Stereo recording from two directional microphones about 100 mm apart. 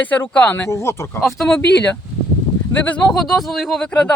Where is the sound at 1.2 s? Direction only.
5° left (ahead or behind).